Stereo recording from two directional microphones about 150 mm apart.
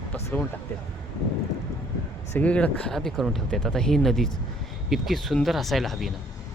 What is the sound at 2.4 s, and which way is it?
Speech, 10° left (ahead or behind).